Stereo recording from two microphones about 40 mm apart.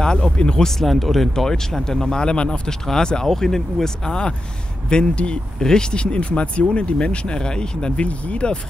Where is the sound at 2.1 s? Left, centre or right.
Left.